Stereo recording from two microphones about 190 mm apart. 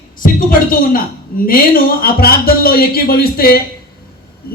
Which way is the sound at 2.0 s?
50° left (ahead or behind).